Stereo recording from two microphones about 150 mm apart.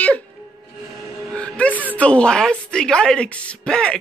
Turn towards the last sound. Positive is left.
turn(degrees=5)  # may be behind; listen again after turning